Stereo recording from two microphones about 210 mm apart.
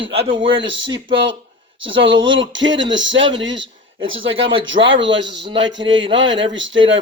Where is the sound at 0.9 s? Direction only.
25° right (ahead or behind).